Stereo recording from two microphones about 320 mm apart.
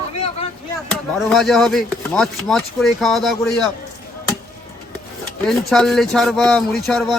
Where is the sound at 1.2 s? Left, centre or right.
Centre.